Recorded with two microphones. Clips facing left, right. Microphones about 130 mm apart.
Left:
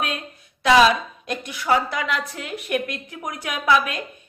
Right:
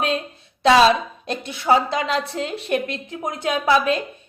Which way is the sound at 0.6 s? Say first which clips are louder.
Right 2 dB; 30° right (ahead or behind).